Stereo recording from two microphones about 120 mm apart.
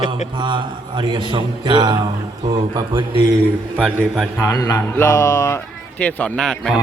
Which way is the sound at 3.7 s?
20° right (ahead or behind).